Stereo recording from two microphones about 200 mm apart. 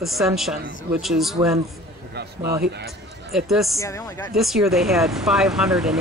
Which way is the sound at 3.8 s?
15° left (ahead or behind).